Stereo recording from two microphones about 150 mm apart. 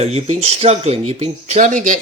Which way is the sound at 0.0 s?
45° right (ahead or behind).